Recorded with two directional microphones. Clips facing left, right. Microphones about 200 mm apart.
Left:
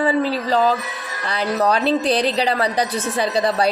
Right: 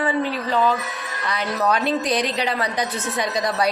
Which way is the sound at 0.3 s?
35° left (ahead or behind).